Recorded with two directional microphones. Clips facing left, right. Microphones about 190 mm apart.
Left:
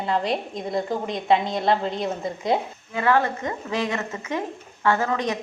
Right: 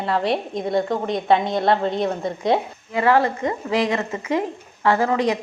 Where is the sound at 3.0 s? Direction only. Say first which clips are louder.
Right 3 dB; 35° right (ahead or behind).